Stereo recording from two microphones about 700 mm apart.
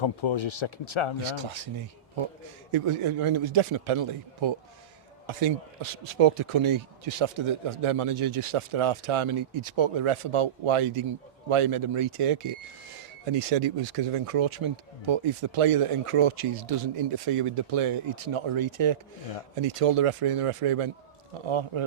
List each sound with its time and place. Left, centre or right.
0.0 s speech: left
1.2 s speech: right
2.7 s speech: right
13.5 s speech: right